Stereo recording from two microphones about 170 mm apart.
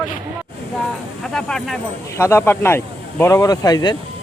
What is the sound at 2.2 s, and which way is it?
Speech, 15° left (ahead or behind).